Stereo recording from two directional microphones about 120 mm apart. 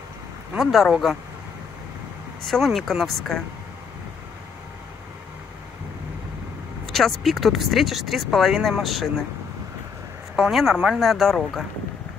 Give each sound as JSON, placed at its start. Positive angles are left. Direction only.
{"t": 0.6, "sound": "speech", "side_deg": 0}
{"t": 2.4, "sound": "speech", "side_deg": 0}
{"t": 6.9, "sound": "speech", "side_deg": 0}
{"t": 10.3, "sound": "speech", "side_deg": 0}